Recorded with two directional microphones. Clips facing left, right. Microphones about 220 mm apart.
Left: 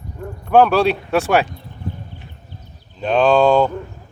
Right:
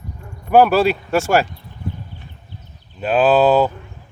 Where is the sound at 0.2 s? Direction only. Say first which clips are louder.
Left 10 dB; 55° left (ahead or behind).